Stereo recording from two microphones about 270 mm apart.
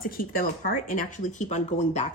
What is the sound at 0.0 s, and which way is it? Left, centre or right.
A woman's voice, left.